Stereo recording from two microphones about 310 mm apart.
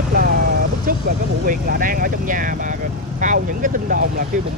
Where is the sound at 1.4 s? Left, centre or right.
Right.